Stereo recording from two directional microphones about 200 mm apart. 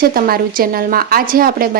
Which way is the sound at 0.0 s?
50° right (ahead or behind).